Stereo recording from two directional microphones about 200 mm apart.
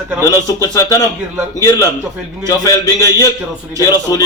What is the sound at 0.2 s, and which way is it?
A man's voice, 15° left (ahead or behind).